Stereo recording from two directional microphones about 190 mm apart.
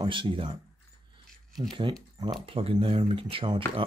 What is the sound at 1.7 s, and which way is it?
Speech, 25° right (ahead or behind).